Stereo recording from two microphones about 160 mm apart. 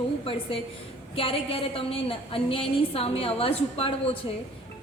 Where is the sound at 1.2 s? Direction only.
35° left (ahead or behind).